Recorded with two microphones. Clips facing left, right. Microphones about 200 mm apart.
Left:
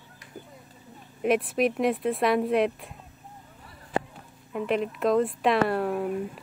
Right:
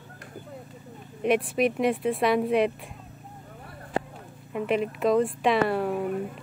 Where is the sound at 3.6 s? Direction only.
60° right (ahead or behind).